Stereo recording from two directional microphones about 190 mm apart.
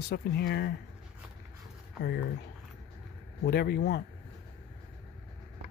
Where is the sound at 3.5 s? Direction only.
55° left (ahead or behind).